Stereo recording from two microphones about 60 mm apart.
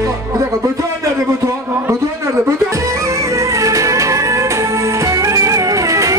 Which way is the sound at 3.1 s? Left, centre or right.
Right.